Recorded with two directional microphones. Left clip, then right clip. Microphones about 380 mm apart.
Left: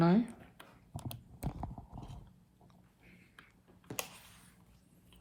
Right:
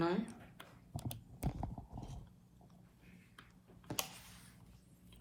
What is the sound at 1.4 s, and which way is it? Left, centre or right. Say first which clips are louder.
Clip-clop: even; centre.